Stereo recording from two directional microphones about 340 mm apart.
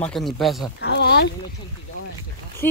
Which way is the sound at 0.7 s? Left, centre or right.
Left.